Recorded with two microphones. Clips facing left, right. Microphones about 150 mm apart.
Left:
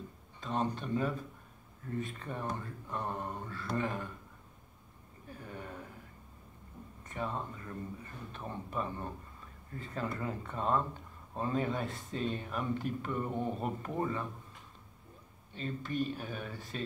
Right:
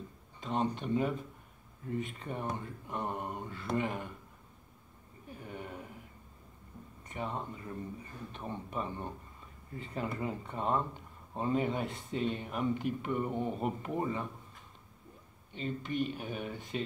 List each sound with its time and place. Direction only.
0.4 s speech: 20° right (ahead or behind)
5.5 s speech: 15° right (ahead or behind)
7.1 s speech: 20° right (ahead or behind)
15.5 s speech: 20° right (ahead or behind)